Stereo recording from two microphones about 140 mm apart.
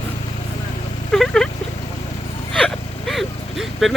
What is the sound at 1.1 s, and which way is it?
Speech, 5° left (ahead or behind).